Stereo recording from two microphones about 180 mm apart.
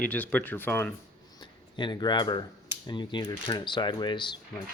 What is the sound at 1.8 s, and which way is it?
Speech, 25° left (ahead or behind).